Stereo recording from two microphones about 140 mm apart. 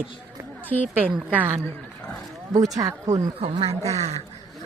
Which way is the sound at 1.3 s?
15° right (ahead or behind).